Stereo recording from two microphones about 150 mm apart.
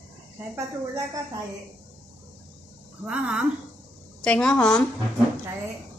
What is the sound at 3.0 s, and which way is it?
Speech, 5° right (ahead or behind).